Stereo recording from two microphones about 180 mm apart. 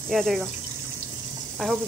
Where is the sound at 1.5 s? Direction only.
5° left (ahead or behind).